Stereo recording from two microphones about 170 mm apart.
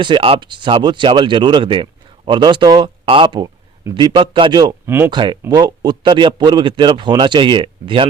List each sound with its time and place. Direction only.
0.0 s speech: 30° right (ahead or behind)
4.9 s speech: 15° right (ahead or behind)
5.1 s speech: 25° right (ahead or behind)